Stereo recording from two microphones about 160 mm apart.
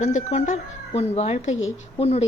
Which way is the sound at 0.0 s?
45° left (ahead or behind).